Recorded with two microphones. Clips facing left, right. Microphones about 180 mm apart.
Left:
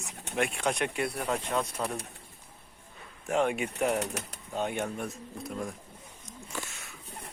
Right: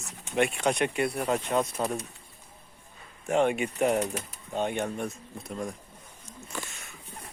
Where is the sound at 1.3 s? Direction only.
30° right (ahead or behind).